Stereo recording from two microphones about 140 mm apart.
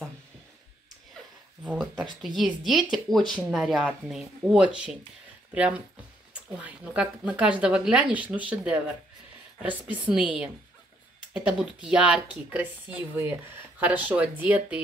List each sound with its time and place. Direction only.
1.6 s speech: 5° right (ahead or behind)